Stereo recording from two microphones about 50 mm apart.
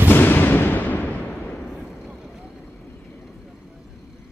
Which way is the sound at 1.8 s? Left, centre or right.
Centre.